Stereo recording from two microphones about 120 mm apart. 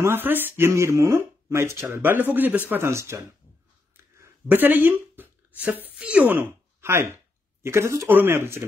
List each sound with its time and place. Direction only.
0.0 s speech: 20° right (ahead or behind)
3.9 s a sound: 20° right (ahead or behind)
5.9 s speech: 10° right (ahead or behind)